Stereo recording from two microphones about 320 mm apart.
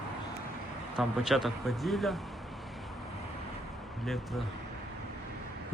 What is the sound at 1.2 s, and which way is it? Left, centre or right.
Speech, centre.